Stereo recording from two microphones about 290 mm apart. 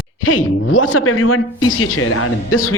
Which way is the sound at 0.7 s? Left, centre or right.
Left.